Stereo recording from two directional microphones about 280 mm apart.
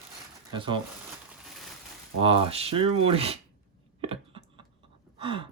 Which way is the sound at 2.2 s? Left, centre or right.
Centre.